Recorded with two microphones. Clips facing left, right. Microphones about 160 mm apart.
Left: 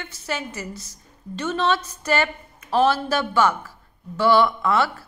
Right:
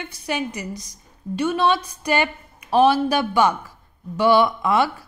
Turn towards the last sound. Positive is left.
turn(degrees=-15)  # may be behind; listen again after turning